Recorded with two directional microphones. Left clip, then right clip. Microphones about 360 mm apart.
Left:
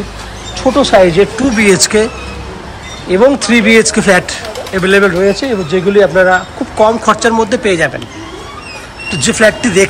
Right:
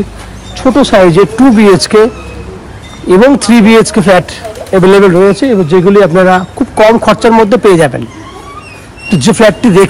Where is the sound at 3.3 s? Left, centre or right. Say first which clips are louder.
Right 3 dB; centre.